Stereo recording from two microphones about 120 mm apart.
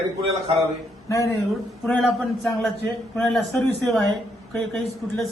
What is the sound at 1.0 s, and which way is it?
Speech, 25° left (ahead or behind).